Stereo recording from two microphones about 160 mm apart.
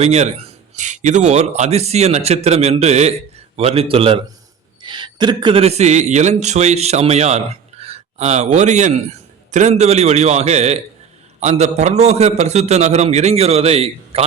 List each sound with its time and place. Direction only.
0.0 s a man's voice: 45° right (ahead or behind)